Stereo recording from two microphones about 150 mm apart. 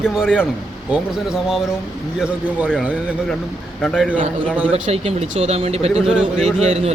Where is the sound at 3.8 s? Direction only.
Centre (ahead or behind).